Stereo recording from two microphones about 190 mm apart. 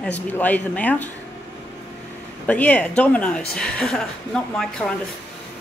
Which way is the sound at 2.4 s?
5° left (ahead or behind).